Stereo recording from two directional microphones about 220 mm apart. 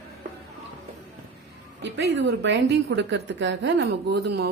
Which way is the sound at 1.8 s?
50° right (ahead or behind).